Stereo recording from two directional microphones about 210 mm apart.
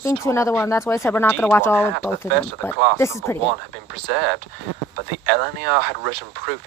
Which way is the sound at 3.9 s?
55° right (ahead or behind).